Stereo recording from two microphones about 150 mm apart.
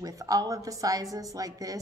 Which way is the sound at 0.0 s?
25° right (ahead or behind).